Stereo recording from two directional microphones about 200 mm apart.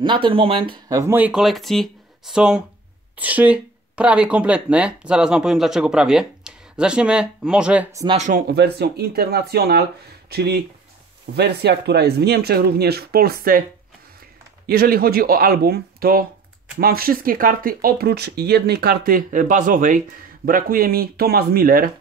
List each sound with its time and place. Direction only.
0.0 s speech: 25° right (ahead or behind)
8.1 s speech: 35° right (ahead or behind)
8.5 s speech: 55° right (ahead or behind)
14.7 s speech: 50° right (ahead or behind)